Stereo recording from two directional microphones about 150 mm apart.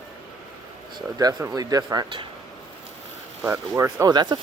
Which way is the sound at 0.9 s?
25° right (ahead or behind).